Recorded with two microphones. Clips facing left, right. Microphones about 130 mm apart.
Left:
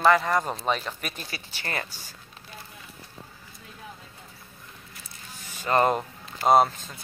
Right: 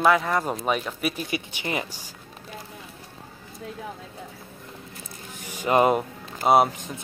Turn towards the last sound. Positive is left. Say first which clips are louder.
# right 1 dB
turn(degrees=-15)  # may be behind; listen again after turning